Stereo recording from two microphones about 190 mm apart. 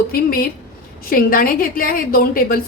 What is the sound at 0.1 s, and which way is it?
A woman's voice, 50° left (ahead or behind).